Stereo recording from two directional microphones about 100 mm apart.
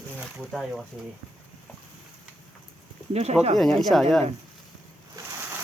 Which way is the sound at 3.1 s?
90° right.